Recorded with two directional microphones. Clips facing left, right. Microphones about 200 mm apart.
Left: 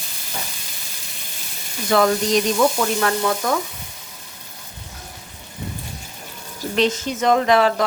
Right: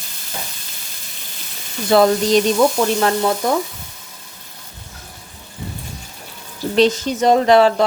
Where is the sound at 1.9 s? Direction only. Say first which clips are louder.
Right 4 dB; 30° right (ahead or behind).